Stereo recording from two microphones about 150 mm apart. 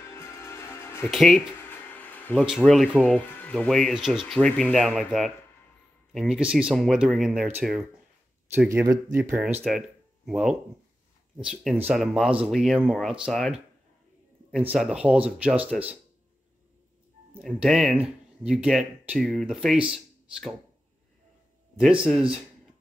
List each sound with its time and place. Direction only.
0.2 s music: 15° left (ahead or behind)
1.1 s speech: centre (ahead or behind)
1.7 s a sound: 15° left (ahead or behind)
2.3 s speech: centre (ahead or behind); by 9.2 s 20° right (ahead or behind)
9.3 s speech: 10° right (ahead or behind)
14.7 s speech: 5° right (ahead or behind)
17.4 s speech: centre (ahead or behind)
21.7 s speech: 5° right (ahead or behind)